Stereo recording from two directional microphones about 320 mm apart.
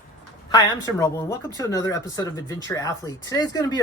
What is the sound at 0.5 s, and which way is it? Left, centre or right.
Speech, centre.